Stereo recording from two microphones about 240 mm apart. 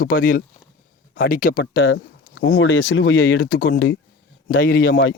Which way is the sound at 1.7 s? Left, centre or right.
Left.